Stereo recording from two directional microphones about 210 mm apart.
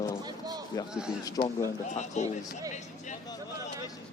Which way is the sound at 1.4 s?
20° left (ahead or behind).